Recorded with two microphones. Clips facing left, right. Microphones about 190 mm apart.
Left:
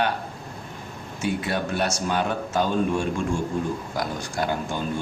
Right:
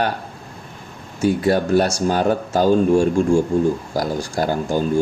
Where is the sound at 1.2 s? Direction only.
40° right (ahead or behind).